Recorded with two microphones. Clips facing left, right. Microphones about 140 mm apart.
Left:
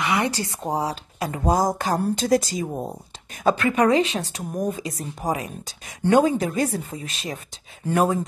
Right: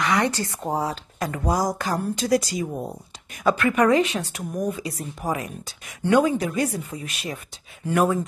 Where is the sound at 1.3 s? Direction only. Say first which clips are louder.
Left 3 dB; 25° left (ahead or behind).